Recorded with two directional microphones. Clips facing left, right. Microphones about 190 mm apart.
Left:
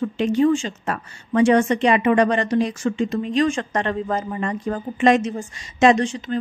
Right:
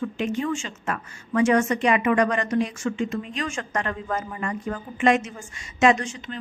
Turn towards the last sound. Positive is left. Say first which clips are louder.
# left 4 dB
turn(degrees=35)  # may be behind; listen again after turning